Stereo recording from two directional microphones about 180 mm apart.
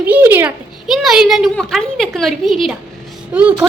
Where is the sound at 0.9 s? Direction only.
Centre (ahead or behind).